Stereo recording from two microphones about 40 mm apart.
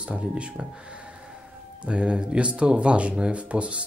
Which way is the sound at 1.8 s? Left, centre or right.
Right.